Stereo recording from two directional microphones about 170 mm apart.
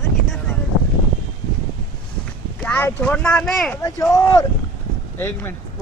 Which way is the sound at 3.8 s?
20° left (ahead or behind).